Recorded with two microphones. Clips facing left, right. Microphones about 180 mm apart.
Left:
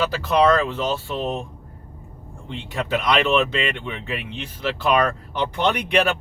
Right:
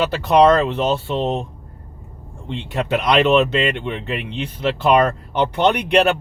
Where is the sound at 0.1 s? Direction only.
65° right (ahead or behind).